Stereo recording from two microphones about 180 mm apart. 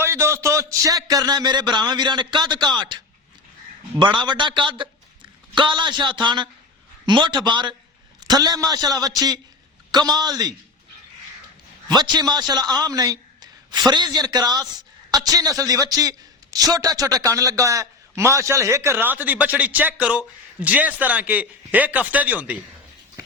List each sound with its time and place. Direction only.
0.0 s a man's voice: 15° right (ahead or behind)
11.9 s a man's voice: 25° right (ahead or behind)